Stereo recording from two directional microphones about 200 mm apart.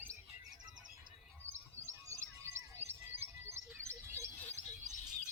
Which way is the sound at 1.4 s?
10° right (ahead or behind).